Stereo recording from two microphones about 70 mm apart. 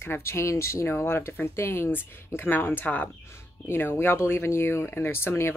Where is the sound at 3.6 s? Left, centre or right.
Left.